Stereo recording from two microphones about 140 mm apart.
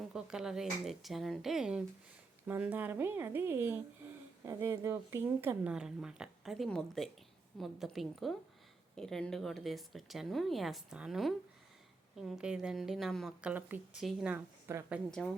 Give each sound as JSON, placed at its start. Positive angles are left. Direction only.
{"t": 0.1, "sound": "speech", "side_deg": -5}
{"t": 14.0, "sound": "speech", "side_deg": 0}
{"t": 14.3, "sound": "a woman's voice", "side_deg": -20}